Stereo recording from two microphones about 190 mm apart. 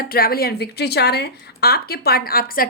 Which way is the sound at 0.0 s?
55° left (ahead or behind).